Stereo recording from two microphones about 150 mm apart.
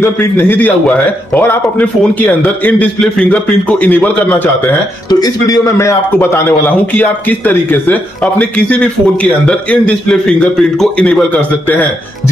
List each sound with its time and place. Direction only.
0.0 s a man's voice: 15° left (ahead or behind)